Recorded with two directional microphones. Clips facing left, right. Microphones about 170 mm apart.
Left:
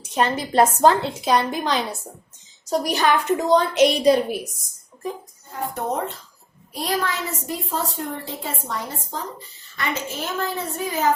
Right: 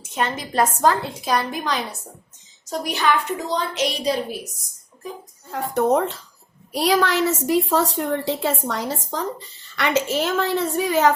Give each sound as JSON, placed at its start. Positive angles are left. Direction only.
{"t": 0.0, "sound": "a woman's voice", "side_deg": 35}
{"t": 2.6, "sound": "a woman's voice", "side_deg": 40}
{"t": 3.5, "sound": "a woman's voice", "side_deg": 55}
{"t": 5.5, "sound": "a woman's voice", "side_deg": -80}
{"t": 9.7, "sound": "a woman's voice", "side_deg": -80}